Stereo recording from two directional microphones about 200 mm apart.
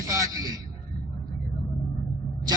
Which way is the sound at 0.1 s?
15° right (ahead or behind).